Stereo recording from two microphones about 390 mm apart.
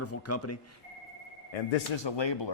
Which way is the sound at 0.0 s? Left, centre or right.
Left.